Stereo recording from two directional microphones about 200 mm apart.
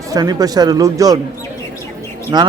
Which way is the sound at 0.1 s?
20° right (ahead or behind).